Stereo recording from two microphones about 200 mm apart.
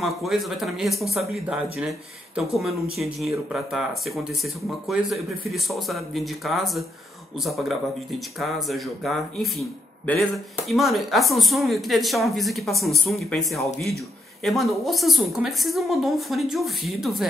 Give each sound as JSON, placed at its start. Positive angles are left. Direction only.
{"t": 0.0, "sound": "speech", "side_deg": 0}